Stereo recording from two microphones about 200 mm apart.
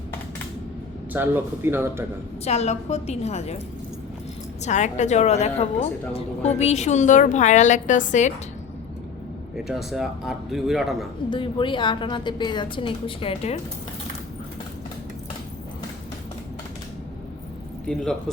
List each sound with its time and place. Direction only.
1.1 s speech: 10° right (ahead or behind)
2.4 s a woman's voice: 30° left (ahead or behind)
4.6 s a woman's voice: 35° left (ahead or behind)
9.6 s speech: centre (ahead or behind)
11.3 s a woman's voice: 25° left (ahead or behind)
17.8 s speech: 5° left (ahead or behind)